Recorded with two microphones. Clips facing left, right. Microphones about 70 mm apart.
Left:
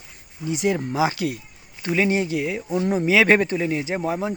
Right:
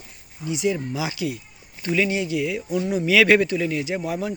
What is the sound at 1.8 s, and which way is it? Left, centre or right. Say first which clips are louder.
Speech: left 2 dB; left.